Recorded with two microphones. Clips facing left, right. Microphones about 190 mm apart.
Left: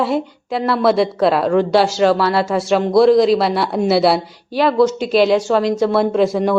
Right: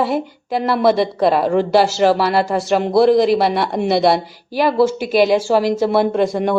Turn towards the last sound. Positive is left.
turn(degrees=0)  # may be behind; listen again after turning